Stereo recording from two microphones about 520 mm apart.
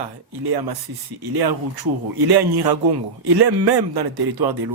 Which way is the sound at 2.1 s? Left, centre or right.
Right.